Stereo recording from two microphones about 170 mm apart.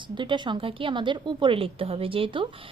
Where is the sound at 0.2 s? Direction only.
25° right (ahead or behind).